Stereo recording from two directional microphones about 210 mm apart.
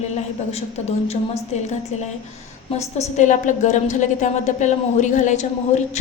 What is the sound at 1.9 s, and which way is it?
A woman's voice, 35° left (ahead or behind).